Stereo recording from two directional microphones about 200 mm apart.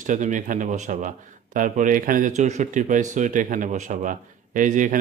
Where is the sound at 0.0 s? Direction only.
40° right (ahead or behind).